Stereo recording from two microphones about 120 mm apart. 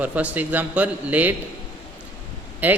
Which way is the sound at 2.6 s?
15° right (ahead or behind).